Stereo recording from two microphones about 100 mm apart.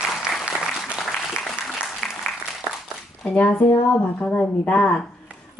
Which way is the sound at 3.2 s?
15° left (ahead or behind).